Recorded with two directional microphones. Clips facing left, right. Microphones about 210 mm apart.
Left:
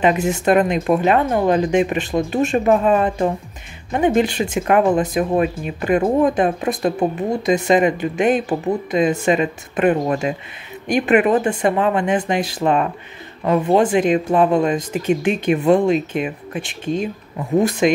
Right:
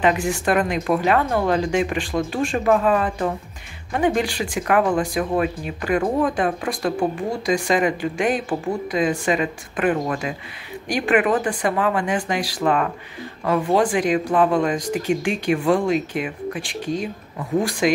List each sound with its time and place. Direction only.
0.0 s speech: 20° left (ahead or behind)